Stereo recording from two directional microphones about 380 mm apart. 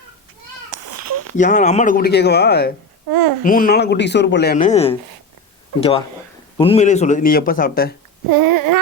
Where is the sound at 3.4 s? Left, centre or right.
Left.